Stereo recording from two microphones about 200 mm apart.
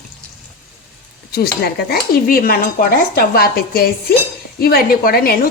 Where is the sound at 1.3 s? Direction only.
50° left (ahead or behind).